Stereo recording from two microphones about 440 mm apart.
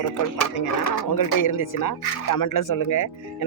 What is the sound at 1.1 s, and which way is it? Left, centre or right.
Speech, left.